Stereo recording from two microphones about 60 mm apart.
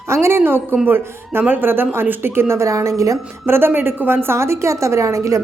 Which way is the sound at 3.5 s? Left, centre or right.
Right.